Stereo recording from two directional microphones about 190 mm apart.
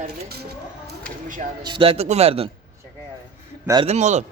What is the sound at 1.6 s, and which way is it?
Speech, 25° right (ahead or behind).